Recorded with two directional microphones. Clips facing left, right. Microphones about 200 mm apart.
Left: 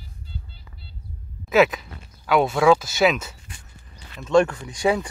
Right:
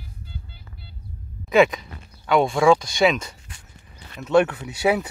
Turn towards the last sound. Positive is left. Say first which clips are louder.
# right 1 dB
turn(degrees=-5)  # may be behind; listen again after turning